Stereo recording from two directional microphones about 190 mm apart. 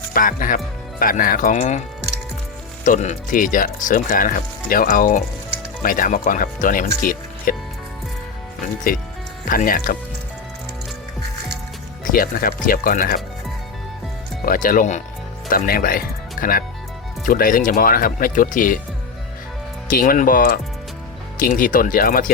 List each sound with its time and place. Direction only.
0.1 s speech: 45° left (ahead or behind)
2.8 s speech: 40° left (ahead or behind)
9.5 s speech: 45° left (ahead or behind)
12.0 s speech: 50° left (ahead or behind)
14.4 s speech: 45° left (ahead or behind)
19.9 s speech: 50° left (ahead or behind)